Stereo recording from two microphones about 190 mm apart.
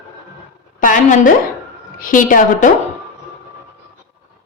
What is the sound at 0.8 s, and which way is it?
A woman's voice, 45° left (ahead or behind).